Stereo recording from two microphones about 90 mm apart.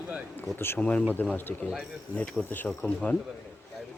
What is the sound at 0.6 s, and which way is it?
Speech, 20° left (ahead or behind).